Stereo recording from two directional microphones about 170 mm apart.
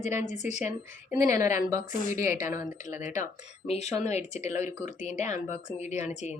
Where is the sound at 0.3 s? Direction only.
45° left (ahead or behind).